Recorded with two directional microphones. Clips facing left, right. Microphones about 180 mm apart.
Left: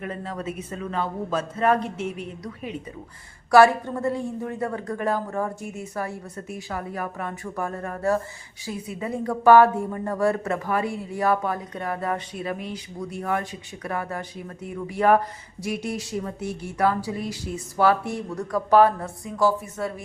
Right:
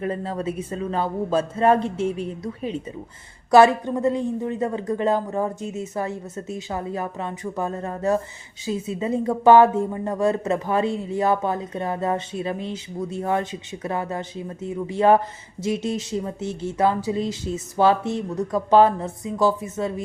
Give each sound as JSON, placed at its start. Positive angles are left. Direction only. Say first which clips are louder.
{"t": 0.0, "sound": "speech", "louder": "right 5 dB", "side_deg": -30}